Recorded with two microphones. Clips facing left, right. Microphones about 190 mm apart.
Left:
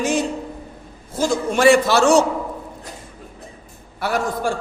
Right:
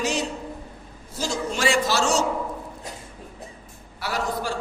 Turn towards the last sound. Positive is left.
turn(degrees=50)  # may be behind; listen again after turning